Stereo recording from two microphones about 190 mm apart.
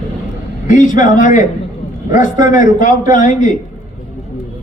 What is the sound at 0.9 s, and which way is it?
A man's voice, 40° left (ahead or behind).